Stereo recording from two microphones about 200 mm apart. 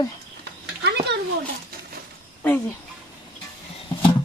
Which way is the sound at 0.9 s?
60° right (ahead or behind).